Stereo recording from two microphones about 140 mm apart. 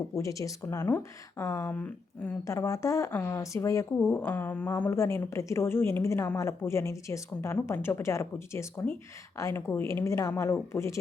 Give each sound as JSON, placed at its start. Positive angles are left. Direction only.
{"t": 0.1, "sound": "a woman's voice", "side_deg": 25}